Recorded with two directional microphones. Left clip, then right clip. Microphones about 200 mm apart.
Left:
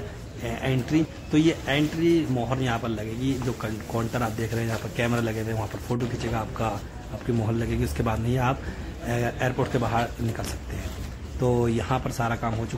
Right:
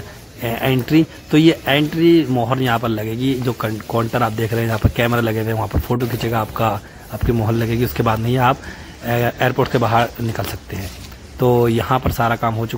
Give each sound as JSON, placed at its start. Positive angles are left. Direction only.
{"t": 0.4, "sound": "speech", "side_deg": -20}